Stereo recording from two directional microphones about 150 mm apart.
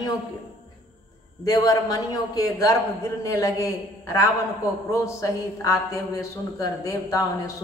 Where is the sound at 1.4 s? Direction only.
25° left (ahead or behind).